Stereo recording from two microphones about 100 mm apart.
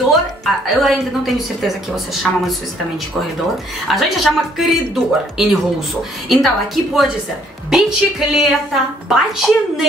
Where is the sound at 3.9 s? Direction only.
Centre (ahead or behind).